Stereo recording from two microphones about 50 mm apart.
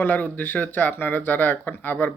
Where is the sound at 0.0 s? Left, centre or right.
Left.